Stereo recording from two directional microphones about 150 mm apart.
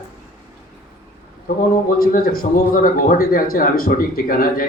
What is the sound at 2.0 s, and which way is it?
A man's voice, 75° left (ahead or behind).